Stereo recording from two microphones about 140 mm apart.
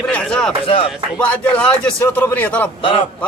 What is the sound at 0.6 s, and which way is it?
Speech, 40° left (ahead or behind).